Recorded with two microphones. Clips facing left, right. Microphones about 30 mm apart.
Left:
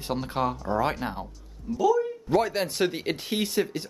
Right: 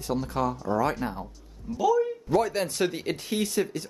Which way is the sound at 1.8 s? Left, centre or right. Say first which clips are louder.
Even; centre.